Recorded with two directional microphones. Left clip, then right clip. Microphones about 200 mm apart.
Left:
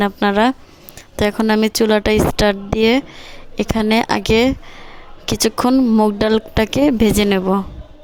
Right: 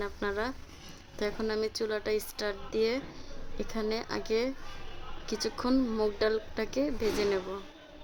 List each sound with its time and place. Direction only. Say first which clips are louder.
0.0 s speech: left 18 dB; 40° left (ahead or behind)
6.1 s speech: left 14 dB; 45° left (ahead or behind)